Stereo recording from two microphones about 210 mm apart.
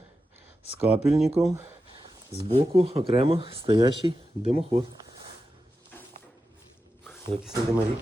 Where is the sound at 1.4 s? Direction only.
5° right (ahead or behind).